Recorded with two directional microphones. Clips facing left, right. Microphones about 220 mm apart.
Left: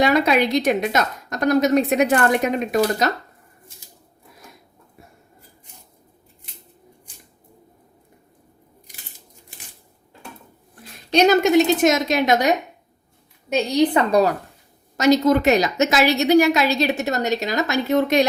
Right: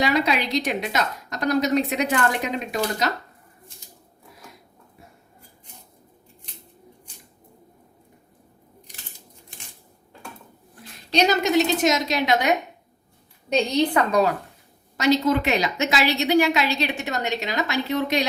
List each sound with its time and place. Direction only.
0.0 s a woman's voice: 50° left (ahead or behind)
11.1 s a woman's voice: 50° left (ahead or behind)
13.5 s a woman's voice: 10° left (ahead or behind)
13.9 s a woman's voice: 35° left (ahead or behind)